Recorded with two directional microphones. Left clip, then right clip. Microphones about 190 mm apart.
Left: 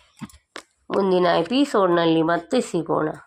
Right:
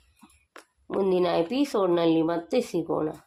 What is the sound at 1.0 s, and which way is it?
Speech, 25° left (ahead or behind).